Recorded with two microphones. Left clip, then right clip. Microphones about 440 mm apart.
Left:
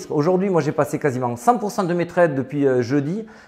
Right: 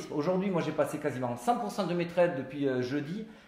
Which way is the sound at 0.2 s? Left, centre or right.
Left.